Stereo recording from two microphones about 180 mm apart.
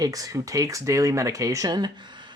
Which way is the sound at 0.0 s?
20° right (ahead or behind).